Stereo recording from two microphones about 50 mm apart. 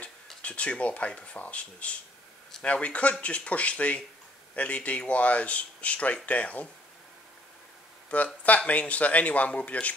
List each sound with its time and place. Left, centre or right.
0.4 s speech: left
8.1 s speech: left